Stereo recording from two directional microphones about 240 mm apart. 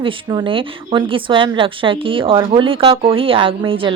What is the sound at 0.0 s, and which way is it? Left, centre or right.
Speech, centre.